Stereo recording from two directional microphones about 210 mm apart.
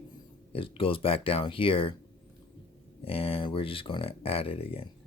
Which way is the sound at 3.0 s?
25° left (ahead or behind).